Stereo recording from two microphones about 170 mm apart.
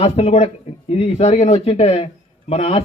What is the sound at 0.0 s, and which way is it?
A man's voice, 35° left (ahead or behind).